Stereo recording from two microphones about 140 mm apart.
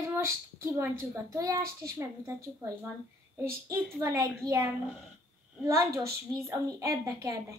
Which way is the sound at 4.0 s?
20° right (ahead or behind).